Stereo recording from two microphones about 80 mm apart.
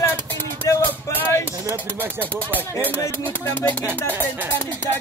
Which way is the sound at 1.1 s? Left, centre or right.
Left.